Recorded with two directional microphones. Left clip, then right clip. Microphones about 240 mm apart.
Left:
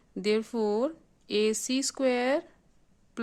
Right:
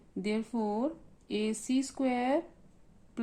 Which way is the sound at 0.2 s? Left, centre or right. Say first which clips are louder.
Left 6 dB; left.